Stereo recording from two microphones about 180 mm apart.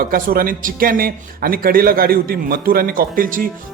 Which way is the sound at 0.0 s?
55° right (ahead or behind).